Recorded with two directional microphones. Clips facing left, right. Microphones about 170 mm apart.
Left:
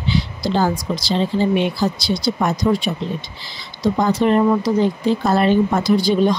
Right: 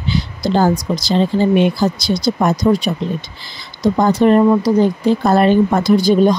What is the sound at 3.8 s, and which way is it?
Speech, 45° right (ahead or behind).